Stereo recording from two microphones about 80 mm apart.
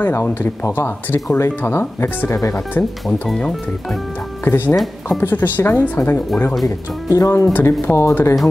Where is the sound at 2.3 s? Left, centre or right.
Left.